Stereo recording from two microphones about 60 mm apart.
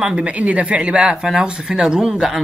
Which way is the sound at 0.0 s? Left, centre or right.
Centre.